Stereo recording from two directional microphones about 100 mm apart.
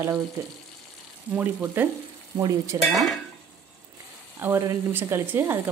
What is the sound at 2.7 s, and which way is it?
Speech, 40° right (ahead or behind).